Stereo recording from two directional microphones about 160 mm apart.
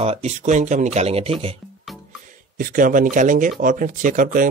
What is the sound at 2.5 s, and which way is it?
Speech, 60° right (ahead or behind).